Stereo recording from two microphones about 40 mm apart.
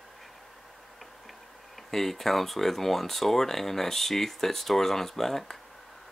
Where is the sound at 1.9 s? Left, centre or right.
Centre.